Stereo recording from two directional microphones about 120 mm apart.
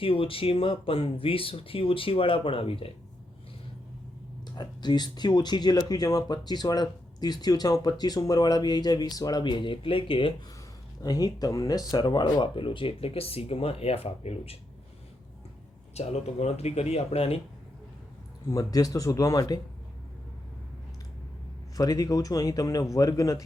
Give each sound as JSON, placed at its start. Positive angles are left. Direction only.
{"t": 0.0, "sound": "speech", "side_deg": 50}
{"t": 4.5, "sound": "speech", "side_deg": 35}
{"t": 11.0, "sound": "speech", "side_deg": 30}
{"t": 16.0, "sound": "speech", "side_deg": 65}
{"t": 18.4, "sound": "speech", "side_deg": 30}
{"t": 21.8, "sound": "speech", "side_deg": 30}